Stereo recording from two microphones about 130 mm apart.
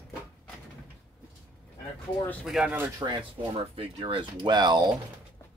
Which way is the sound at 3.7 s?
45° right (ahead or behind).